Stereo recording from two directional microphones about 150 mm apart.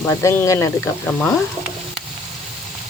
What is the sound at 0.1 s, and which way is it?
Speech, 20° left (ahead or behind).